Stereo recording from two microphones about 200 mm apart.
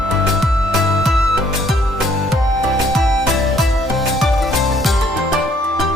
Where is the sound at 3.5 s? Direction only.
Centre (ahead or behind).